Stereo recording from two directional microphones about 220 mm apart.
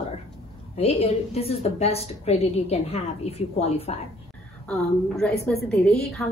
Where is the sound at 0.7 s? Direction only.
25° left (ahead or behind).